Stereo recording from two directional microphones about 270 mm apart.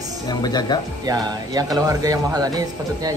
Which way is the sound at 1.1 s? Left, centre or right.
Centre.